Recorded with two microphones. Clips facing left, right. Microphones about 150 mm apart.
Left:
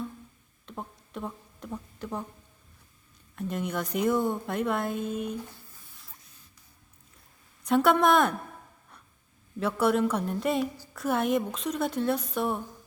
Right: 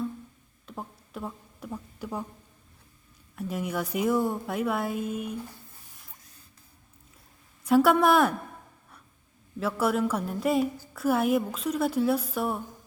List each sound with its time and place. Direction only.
0.6 s a sound: 5° right (ahead or behind)
3.3 s speech: 5° right (ahead or behind)
7.6 s a woman's voice: 5° right (ahead or behind)
9.6 s a woman's voice: 5° right (ahead or behind)